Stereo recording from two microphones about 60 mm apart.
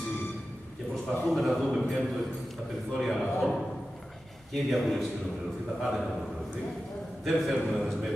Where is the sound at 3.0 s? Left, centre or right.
Centre.